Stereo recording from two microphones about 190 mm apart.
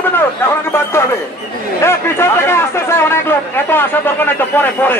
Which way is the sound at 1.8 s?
15° left (ahead or behind).